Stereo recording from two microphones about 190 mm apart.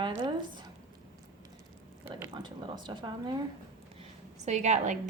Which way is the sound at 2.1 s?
25° right (ahead or behind).